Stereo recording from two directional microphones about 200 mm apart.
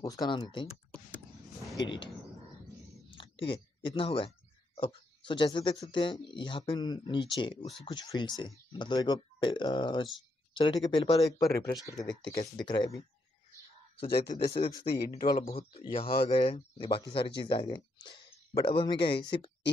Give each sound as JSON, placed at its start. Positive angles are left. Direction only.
{"t": 0.0, "sound": "speech", "side_deg": 20}
{"t": 1.8, "sound": "speech", "side_deg": 25}
{"t": 3.2, "sound": "speech", "side_deg": 25}
{"t": 14.1, "sound": "speech", "side_deg": 50}
{"t": 14.7, "sound": "speech", "side_deg": 25}
{"t": 15.0, "sound": "a man's voice", "side_deg": 35}